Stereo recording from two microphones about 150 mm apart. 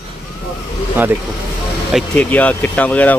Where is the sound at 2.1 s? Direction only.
10° left (ahead or behind).